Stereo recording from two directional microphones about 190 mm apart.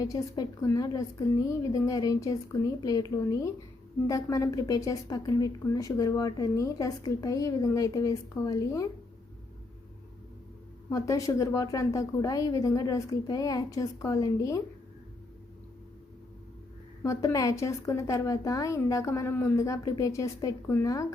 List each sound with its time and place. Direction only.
0.0 s a woman's voice: 20° left (ahead or behind)
10.8 s a woman's voice: 15° left (ahead or behind)
17.0 s a woman's voice: 15° left (ahead or behind)